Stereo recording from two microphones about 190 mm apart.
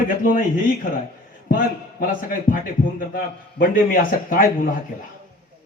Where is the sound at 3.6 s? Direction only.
45° left (ahead or behind).